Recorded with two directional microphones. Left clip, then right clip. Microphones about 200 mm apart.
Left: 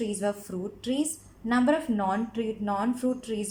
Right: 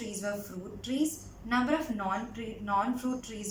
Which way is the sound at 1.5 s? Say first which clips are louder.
Left 5 dB; 50° left (ahead or behind).